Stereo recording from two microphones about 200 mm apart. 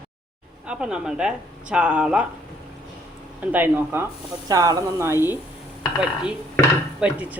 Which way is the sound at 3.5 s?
10° right (ahead or behind).